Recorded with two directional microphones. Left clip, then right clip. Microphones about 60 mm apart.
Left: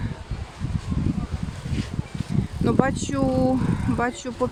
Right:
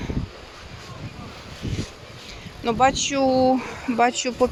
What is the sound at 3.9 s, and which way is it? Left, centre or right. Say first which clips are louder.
Speech: right 6 dB; left.